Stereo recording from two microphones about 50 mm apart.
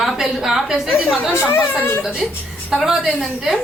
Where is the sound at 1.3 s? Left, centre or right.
Left.